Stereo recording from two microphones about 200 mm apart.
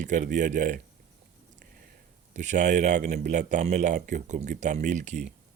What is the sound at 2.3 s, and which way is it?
Speech, 40° right (ahead or behind).